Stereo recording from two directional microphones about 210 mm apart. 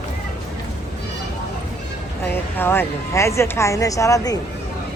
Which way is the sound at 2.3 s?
10° left (ahead or behind).